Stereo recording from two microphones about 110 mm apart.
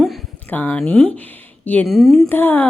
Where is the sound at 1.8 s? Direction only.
Centre (ahead or behind).